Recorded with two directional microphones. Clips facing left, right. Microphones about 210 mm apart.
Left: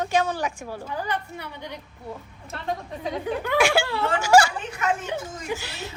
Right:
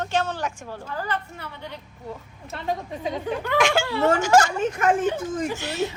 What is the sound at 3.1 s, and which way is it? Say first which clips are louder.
A woman's voice: even; 10° left (ahead or behind).